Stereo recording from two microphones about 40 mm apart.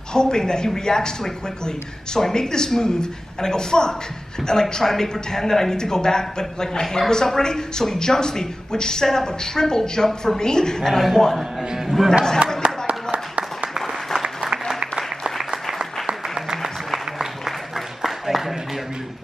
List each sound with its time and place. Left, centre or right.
0.1 s speech: centre
10.9 s a man's voice: centre
11.3 s a man's voice: centre
12.6 s a sound: right
14.2 s applause: centre
15.0 s applause: centre
16.6 s applause: centre